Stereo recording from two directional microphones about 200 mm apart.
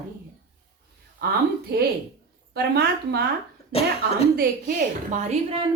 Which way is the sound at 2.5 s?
55° right (ahead or behind).